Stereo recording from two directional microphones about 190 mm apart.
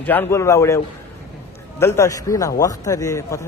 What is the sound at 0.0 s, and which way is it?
Speech, 10° left (ahead or behind).